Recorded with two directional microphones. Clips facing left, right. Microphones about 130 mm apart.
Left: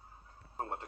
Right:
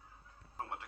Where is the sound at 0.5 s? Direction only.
40° left (ahead or behind).